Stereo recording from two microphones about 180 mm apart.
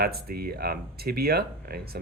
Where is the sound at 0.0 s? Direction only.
60° right (ahead or behind).